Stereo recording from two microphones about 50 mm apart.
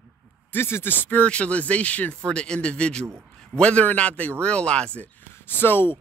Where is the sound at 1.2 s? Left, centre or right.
Left.